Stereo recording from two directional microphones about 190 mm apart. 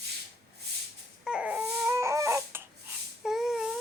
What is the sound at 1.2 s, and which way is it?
Baby cry, 5° right (ahead or behind).